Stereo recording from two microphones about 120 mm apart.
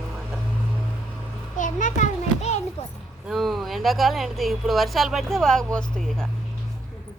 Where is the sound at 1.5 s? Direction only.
90° left; by 2.6 s 70° left (ahead or behind).